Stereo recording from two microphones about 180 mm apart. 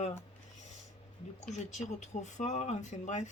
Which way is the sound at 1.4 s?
40° left (ahead or behind).